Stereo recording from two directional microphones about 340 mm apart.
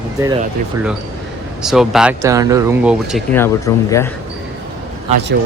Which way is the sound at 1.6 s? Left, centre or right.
Centre.